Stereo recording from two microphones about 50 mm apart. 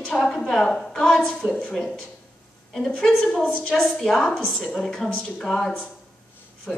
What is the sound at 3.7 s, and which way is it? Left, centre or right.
A woman's voice, centre.